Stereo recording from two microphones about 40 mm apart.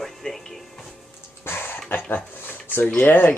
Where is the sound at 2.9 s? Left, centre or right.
Left.